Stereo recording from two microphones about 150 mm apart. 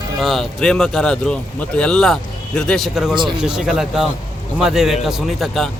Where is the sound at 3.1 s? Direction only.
30° right (ahead or behind).